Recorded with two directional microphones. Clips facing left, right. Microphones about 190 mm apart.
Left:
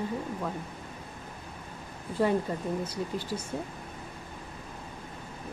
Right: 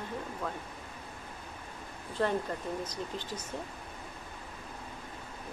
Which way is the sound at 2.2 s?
10° left (ahead or behind).